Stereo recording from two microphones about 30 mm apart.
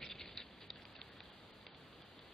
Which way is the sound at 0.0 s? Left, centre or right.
Centre.